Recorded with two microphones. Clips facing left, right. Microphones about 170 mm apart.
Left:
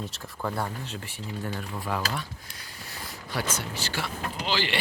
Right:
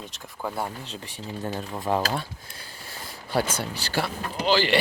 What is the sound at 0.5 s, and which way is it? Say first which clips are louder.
Speech: even; 20° right (ahead or behind).